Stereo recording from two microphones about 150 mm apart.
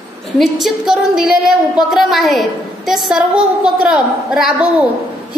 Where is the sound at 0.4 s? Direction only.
Centre (ahead or behind).